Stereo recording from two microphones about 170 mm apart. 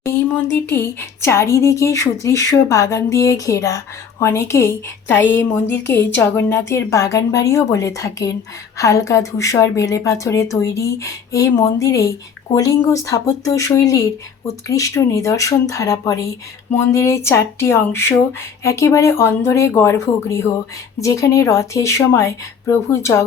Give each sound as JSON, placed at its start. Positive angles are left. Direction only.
{"t": 0.5, "sound": "speech", "side_deg": 15}